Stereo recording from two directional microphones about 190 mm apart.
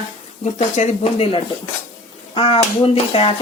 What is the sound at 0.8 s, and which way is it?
Speech, 35° left (ahead or behind).